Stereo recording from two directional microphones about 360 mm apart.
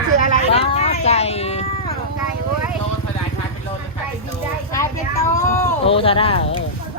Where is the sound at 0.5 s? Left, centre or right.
Centre.